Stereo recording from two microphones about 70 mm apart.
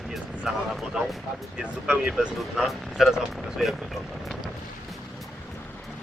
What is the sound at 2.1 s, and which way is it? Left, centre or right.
Speech, centre.